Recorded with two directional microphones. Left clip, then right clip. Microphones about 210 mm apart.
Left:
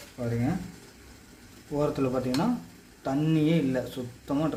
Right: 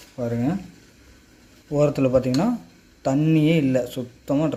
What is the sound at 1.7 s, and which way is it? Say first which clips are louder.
Speech: right 9 dB; 30° right (ahead or behind).